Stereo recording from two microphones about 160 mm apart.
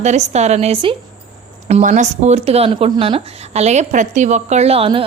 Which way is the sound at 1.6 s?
45° right (ahead or behind).